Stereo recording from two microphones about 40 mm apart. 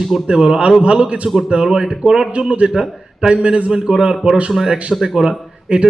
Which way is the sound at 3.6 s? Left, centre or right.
Centre.